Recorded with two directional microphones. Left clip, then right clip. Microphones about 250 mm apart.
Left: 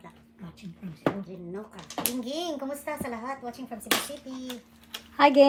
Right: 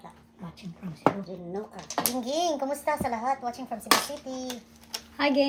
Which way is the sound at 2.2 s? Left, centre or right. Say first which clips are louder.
Right 5 dB; centre.